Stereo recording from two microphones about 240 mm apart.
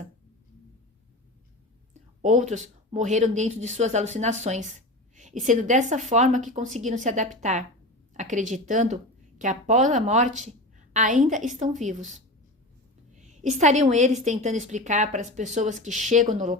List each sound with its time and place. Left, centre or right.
1.9 s a woman's voice: right